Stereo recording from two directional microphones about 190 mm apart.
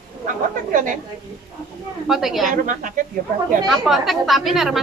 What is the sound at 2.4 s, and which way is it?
Speech, 45° right (ahead or behind).